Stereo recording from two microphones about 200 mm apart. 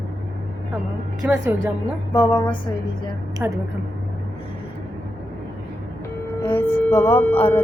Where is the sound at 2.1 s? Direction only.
25° left (ahead or behind).